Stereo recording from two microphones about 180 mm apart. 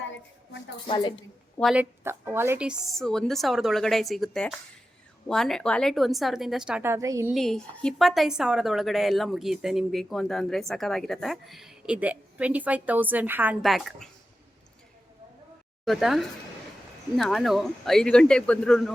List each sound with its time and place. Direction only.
0.9 s a woman's voice: 25° left (ahead or behind)
1.7 s a woman's voice: 10° right (ahead or behind)
7.3 s a woman's voice: centre (ahead or behind)
15.8 s a woman's voice: centre (ahead or behind)